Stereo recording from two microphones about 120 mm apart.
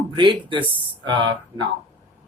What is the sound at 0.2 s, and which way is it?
A man's voice, 45° right (ahead or behind).